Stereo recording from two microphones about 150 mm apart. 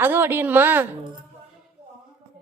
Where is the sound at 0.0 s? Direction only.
15° right (ahead or behind).